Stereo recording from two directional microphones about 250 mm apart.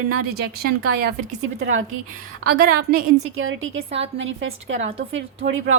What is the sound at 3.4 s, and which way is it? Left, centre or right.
A woman's voice, right.